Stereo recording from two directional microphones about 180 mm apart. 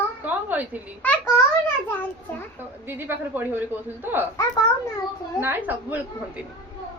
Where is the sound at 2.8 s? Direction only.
10° right (ahead or behind).